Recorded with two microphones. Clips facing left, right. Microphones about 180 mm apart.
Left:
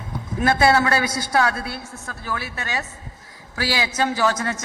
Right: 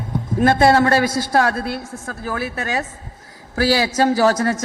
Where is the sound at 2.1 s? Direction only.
50° right (ahead or behind).